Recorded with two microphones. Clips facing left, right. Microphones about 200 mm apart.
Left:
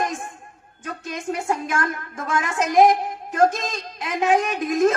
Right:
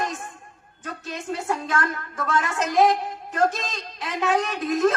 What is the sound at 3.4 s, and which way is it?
Speech, 45° left (ahead or behind).